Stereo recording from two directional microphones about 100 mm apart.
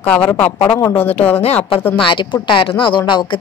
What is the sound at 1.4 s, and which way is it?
Speech, 90° left.